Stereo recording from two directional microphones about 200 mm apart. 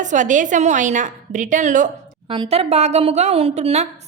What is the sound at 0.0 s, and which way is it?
A woman's voice, 40° right (ahead or behind).